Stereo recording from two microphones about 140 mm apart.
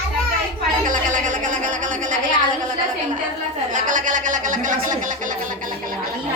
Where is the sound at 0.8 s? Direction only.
70° right (ahead or behind).